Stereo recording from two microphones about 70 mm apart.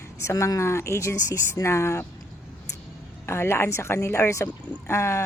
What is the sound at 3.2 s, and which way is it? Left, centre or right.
A woman's voice, left.